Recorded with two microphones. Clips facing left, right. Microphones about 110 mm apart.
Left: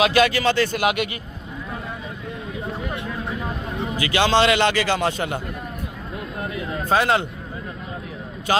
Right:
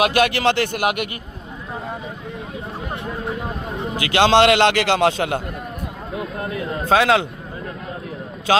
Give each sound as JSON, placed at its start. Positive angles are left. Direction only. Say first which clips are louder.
{"t": 0.0, "sound": "speech", "louder": "right 1 dB", "side_deg": -55}
{"t": 3.9, "sound": "a man's voice", "louder": "right 4 dB", "side_deg": -65}
{"t": 6.8, "sound": "speech", "louder": "right 3 dB", "side_deg": -90}